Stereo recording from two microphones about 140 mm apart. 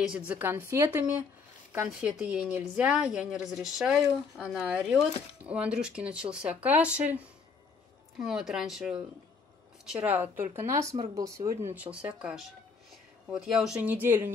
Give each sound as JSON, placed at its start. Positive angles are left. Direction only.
{"t": 0.0, "sound": "a woman's voice", "side_deg": -10}